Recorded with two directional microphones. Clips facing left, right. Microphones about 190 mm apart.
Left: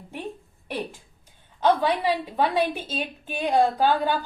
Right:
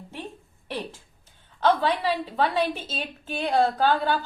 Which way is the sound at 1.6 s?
10° left (ahead or behind).